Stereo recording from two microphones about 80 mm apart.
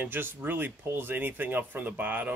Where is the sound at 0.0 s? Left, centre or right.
Right.